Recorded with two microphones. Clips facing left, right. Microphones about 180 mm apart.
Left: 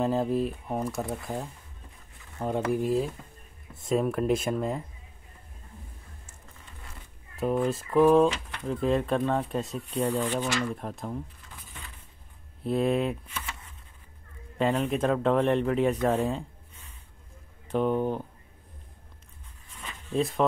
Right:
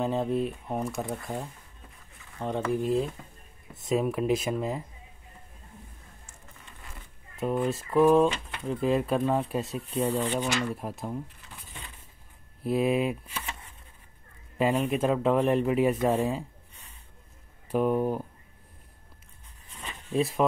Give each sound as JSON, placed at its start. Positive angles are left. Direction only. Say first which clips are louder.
{"t": 0.0, "sound": "speech", "louder": "left 1 dB", "side_deg": 0}
{"t": 7.3, "sound": "speech", "louder": "left 1 dB", "side_deg": 0}
{"t": 10.0, "sound": "speech", "louder": "even", "side_deg": -15}
{"t": 12.6, "sound": "speech", "louder": "even", "side_deg": -5}
{"t": 13.3, "sound": "a sound", "louder": "right 1 dB", "side_deg": -30}
{"t": 14.6, "sound": "speech", "louder": "even", "side_deg": -10}
{"t": 17.6, "sound": "speech", "louder": "right 1 dB", "side_deg": -5}
{"t": 20.1, "sound": "speech", "louder": "even", "side_deg": -5}